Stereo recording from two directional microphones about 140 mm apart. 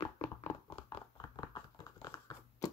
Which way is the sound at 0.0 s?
45° left (ahead or behind).